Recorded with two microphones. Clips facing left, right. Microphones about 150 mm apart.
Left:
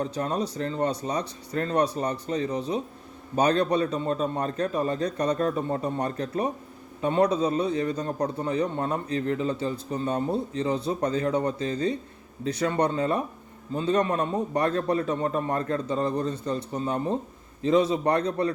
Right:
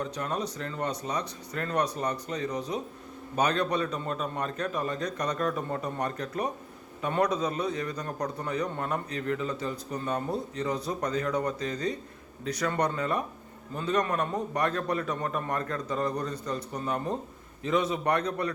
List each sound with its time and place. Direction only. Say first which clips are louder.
0.0 s a man's voice: left 4 dB; 35° left (ahead or behind)